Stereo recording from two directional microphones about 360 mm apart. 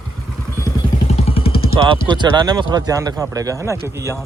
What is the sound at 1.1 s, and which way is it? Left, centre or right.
Vehicle, centre.